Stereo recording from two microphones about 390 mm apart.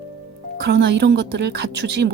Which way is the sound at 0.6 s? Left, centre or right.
Right.